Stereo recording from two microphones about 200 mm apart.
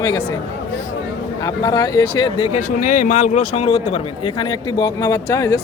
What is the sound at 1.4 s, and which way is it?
A man's voice, 20° left (ahead or behind).